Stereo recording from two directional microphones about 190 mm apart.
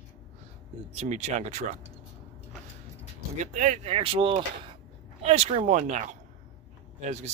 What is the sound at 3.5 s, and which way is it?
Speech, 40° right (ahead or behind).